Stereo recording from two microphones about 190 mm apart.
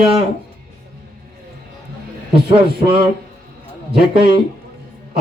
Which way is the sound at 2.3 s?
30° right (ahead or behind).